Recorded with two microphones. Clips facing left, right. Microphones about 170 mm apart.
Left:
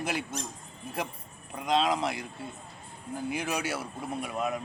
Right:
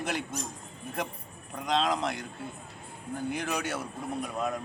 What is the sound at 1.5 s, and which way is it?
Speech, centre (ahead or behind).